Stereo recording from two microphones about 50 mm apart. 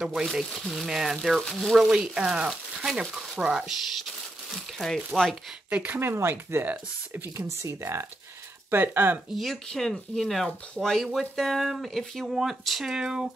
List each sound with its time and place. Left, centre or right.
0.0 s speech: centre
4.5 s speech: centre
5.7 s speech: right
5.9 s speech: right
6.3 s speech: right
7.3 s speech: right
8.6 s speech: right
9.3 s speech: centre